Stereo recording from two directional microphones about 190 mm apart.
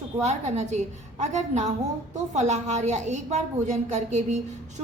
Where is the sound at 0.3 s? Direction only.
35° right (ahead or behind).